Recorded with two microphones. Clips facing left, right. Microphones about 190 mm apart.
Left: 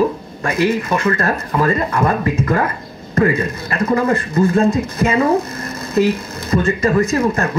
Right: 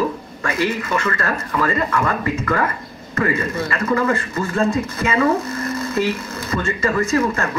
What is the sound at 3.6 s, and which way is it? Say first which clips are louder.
Speech: left 4 dB; 40° left (ahead or behind).